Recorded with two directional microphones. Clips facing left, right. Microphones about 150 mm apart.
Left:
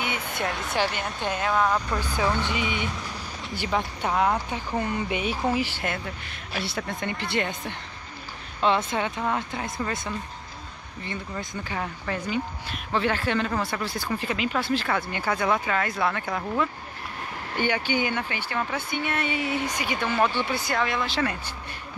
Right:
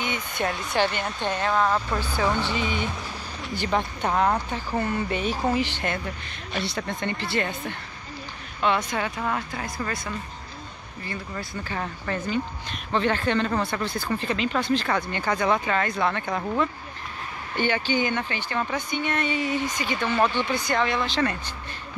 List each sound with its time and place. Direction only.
0.0 s a sound: 5° left (ahead or behind)
0.7 s speech: centre (ahead or behind)
2.4 s speech: 15° left (ahead or behind)
7.2 s speech: 20° left (ahead or behind)
11.3 s speech: 10° left (ahead or behind)
17.6 s speech: 15° left (ahead or behind)